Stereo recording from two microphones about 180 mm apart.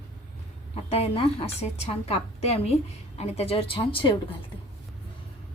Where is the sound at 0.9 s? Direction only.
35° left (ahead or behind).